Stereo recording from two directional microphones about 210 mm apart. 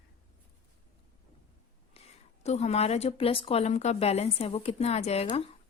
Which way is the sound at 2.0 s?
30° left (ahead or behind).